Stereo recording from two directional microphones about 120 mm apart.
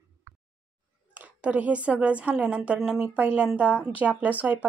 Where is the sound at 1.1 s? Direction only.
15° right (ahead or behind).